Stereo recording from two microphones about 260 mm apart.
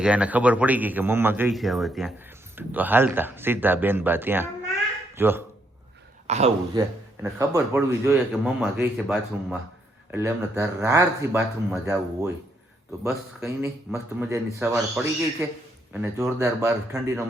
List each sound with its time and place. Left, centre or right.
0.0 s a man's voice: centre
6.2 s speech: right
7.2 s a man's voice: centre
13.4 s a man's voice: centre